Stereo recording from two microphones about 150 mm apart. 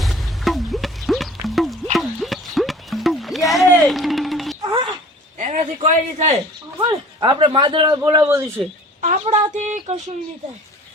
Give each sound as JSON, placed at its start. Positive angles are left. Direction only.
{"t": 0.0, "sound": "a sound", "side_deg": 0}
{"t": 5.4, "sound": "speech", "side_deg": -50}
{"t": 6.7, "sound": "speech", "side_deg": -25}
{"t": 9.0, "sound": "speech", "side_deg": -45}